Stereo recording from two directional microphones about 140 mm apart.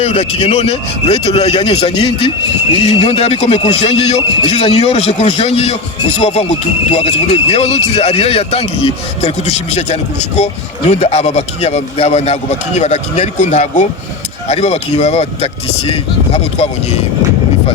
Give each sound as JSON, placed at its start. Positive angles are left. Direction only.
{"t": 0.0, "sound": "a man's voice", "side_deg": 45}